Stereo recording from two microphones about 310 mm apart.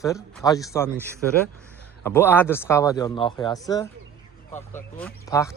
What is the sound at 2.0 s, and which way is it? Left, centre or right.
Speech, centre.